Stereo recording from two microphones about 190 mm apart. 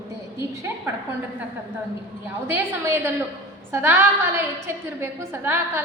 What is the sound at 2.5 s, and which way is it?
A woman's voice, 10° right (ahead or behind).